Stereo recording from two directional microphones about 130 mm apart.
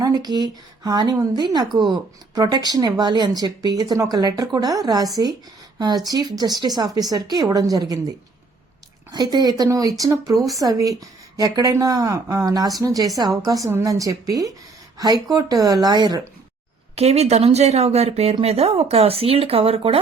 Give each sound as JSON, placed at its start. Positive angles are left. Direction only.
{"t": 0.0, "sound": "speech", "side_deg": -30}
{"t": 6.1, "sound": "a woman's voice", "side_deg": -30}
{"t": 9.1, "sound": "a woman's voice", "side_deg": -30}
{"t": 16.9, "sound": "speech", "side_deg": -55}